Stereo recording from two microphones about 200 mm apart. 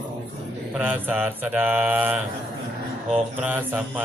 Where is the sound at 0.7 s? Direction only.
10° right (ahead or behind).